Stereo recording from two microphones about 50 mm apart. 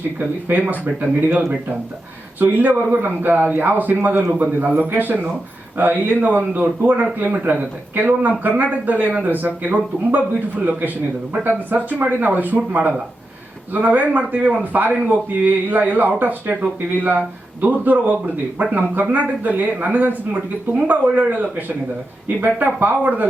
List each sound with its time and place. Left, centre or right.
0.2 s a man's voice: right
2.5 s a man's voice: right
4.3 s a man's voice: right